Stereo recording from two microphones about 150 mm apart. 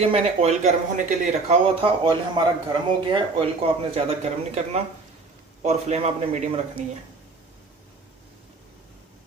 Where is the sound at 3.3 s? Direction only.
40° right (ahead or behind).